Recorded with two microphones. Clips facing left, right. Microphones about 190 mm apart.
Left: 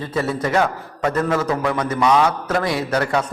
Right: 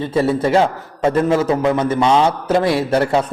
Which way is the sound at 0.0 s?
25° right (ahead or behind).